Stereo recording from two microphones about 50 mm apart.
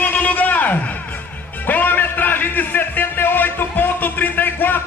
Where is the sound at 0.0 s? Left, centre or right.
Left.